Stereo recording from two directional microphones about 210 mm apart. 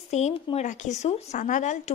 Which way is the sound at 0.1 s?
30° left (ahead or behind).